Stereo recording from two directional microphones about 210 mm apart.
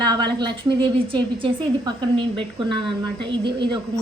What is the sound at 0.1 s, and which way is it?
A woman's voice, 20° right (ahead or behind).